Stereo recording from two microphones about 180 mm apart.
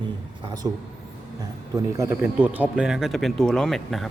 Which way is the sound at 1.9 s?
15° right (ahead or behind).